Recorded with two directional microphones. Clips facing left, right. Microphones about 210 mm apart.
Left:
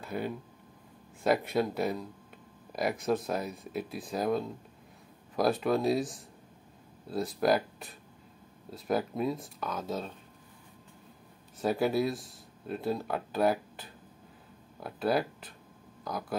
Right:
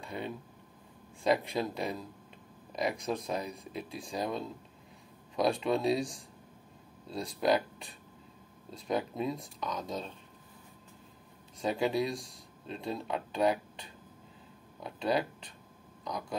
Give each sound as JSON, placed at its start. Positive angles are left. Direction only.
{"t": 0.0, "sound": "speech", "side_deg": 5}
{"t": 11.6, "sound": "speech", "side_deg": 5}